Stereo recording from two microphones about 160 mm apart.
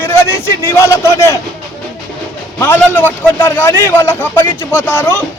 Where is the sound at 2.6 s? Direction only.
15° left (ahead or behind).